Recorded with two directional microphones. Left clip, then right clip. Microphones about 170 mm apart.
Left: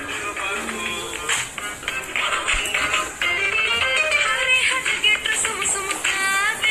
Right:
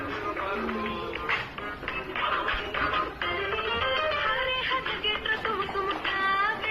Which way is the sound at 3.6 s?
20° left (ahead or behind).